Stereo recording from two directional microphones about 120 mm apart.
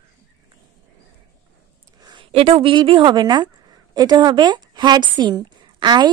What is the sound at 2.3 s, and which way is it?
A woman's voice, 55° right (ahead or behind).